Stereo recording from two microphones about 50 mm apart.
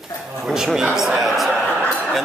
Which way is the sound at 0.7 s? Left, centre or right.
Centre.